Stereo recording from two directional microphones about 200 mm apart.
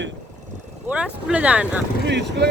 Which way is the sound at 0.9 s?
5° right (ahead or behind).